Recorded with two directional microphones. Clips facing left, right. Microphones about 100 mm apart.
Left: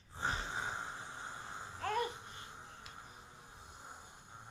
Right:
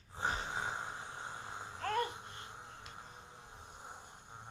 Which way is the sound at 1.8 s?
15° left (ahead or behind).